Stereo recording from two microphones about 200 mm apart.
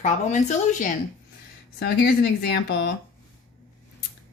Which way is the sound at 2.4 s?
50° left (ahead or behind).